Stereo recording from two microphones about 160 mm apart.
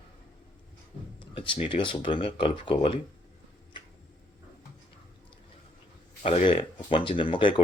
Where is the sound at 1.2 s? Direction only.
30° left (ahead or behind).